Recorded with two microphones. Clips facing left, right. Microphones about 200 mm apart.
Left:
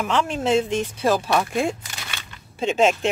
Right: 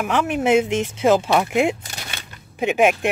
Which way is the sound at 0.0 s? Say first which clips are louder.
Right 2 dB; 15° right (ahead or behind).